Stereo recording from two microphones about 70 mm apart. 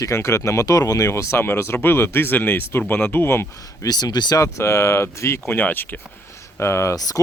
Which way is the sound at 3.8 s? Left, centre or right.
Left.